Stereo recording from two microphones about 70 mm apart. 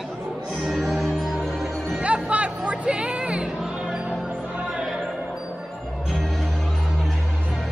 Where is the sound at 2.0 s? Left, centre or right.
Centre.